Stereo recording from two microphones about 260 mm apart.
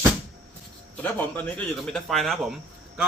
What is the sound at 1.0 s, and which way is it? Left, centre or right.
Speech, centre.